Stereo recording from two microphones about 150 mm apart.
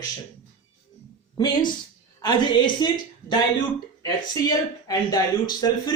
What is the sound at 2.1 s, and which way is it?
A woman's voice, 30° left (ahead or behind).